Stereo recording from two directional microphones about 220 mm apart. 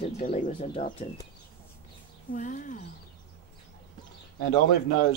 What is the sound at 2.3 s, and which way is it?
Speech, 35° left (ahead or behind).